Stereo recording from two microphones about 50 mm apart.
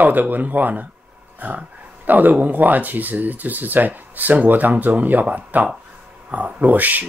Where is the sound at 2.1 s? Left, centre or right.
Right.